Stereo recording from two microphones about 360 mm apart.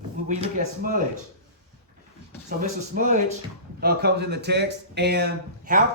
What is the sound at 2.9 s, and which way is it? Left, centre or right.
A man's voice, right.